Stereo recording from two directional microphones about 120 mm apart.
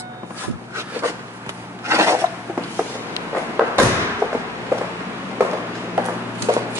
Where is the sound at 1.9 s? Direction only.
20° right (ahead or behind).